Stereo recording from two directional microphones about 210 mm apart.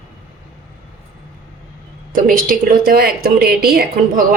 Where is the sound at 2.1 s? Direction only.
40° right (ahead or behind).